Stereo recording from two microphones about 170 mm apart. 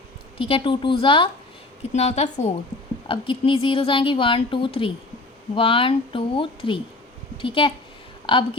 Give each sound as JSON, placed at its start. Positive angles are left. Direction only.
{"t": 0.3, "sound": "speech", "side_deg": 30}
{"t": 1.9, "sound": "speech", "side_deg": 40}
{"t": 3.1, "sound": "speech", "side_deg": 30}